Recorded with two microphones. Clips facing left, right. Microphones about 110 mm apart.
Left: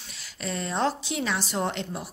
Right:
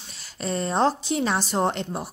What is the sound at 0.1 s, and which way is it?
A woman's voice, 40° right (ahead or behind).